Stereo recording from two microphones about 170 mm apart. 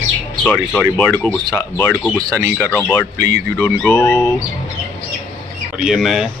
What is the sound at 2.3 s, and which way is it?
Speech, 15° right (ahead or behind).